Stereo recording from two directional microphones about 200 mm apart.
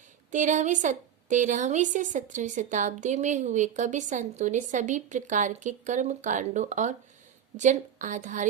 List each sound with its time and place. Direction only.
0.3 s a woman's voice: 40° right (ahead or behind)